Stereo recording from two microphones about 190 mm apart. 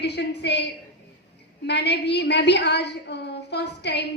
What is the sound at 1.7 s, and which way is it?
A woman's voice, 60° left (ahead or behind).